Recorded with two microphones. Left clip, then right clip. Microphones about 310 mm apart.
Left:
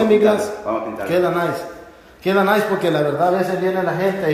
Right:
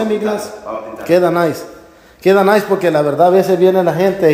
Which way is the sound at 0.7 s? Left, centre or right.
Left.